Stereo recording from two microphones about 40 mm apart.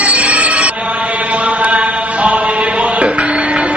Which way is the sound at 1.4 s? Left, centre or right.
Right.